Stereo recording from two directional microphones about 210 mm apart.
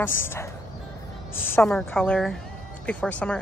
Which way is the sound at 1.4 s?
5° left (ahead or behind).